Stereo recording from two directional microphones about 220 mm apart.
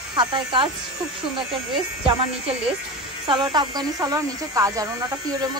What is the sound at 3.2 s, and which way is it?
Speech, 20° right (ahead or behind).